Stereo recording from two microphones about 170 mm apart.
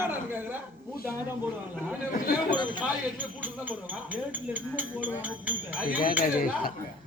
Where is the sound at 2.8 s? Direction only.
10° right (ahead or behind).